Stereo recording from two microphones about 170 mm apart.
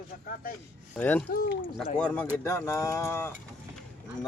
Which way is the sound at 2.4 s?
15° left (ahead or behind).